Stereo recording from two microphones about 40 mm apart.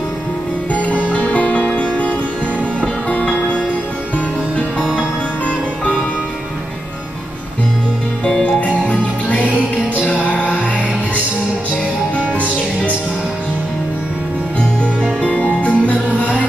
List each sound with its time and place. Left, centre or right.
0.7 s music: left
8.5 s music: left
11.7 s music: left
15.2 s music: left